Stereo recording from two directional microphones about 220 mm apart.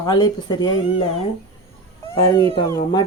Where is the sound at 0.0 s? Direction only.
20° left (ahead or behind).